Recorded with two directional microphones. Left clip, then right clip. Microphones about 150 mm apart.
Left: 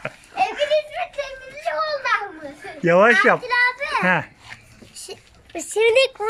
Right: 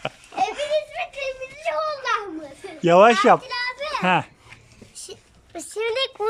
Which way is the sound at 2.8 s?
10° right (ahead or behind).